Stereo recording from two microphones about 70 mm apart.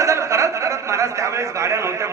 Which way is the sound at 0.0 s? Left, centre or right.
Right.